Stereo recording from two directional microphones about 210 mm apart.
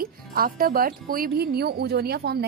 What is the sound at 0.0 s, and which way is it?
Speech, 45° right (ahead or behind).